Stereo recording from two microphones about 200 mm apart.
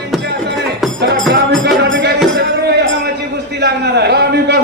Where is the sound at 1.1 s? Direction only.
Centre (ahead or behind).